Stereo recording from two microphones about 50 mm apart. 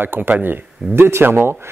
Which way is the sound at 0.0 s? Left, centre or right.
Right.